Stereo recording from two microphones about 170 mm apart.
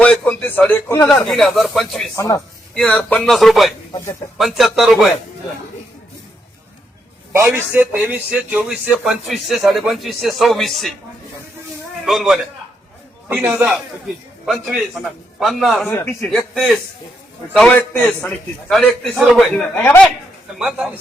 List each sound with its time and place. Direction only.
0.0 s a man's voice: 10° left (ahead or behind)
1.3 s a man's voice: centre (ahead or behind)
2.1 s a man's voice: 15° left (ahead or behind)
2.7 s a man's voice: 5° left (ahead or behind)
7.3 s a man's voice: 10° right (ahead or behind)
12.0 s a man's voice: centre (ahead or behind)
20.6 s a man's voice: centre (ahead or behind)